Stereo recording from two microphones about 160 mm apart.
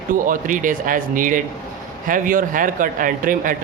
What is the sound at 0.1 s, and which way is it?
A man's voice, 55° right (ahead or behind).